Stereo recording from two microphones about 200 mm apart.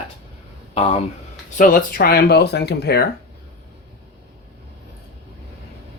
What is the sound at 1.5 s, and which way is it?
Speech, 40° left (ahead or behind).